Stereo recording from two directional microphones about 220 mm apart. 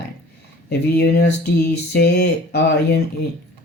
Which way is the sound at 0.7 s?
45° left (ahead or behind).